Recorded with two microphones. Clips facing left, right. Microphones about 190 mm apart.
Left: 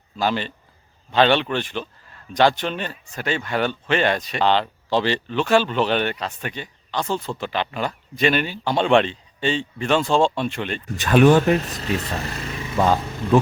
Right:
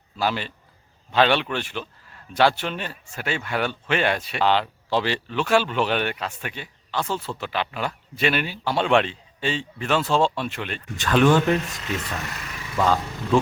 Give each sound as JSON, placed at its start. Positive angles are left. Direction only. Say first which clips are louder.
{"t": 0.2, "sound": "a man's voice", "louder": "left 2 dB", "side_deg": -5}
{"t": 11.0, "sound": "speech", "louder": "left 4 dB", "side_deg": 20}
{"t": 11.5, "sound": "speech", "louder": "left 3 dB", "side_deg": 35}